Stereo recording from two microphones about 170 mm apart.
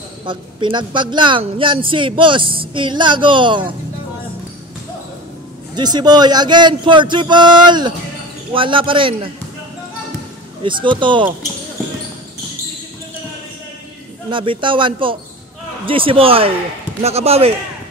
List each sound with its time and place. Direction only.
0.2 s speech: 30° right (ahead or behind)
5.8 s a man's voice: 25° right (ahead or behind)
10.6 s speech: 30° right (ahead or behind)
14.3 s a man's voice: 30° right (ahead or behind)